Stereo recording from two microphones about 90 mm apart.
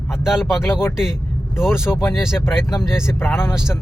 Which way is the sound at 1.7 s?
30° left (ahead or behind).